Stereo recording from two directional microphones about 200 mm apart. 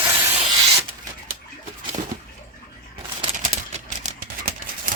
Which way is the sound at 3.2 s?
30° right (ahead or behind).